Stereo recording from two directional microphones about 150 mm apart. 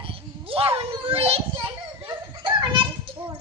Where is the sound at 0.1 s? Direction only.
40° right (ahead or behind).